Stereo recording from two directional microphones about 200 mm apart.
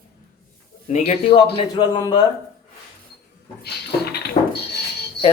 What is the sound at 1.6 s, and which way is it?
Speech, 20° left (ahead or behind).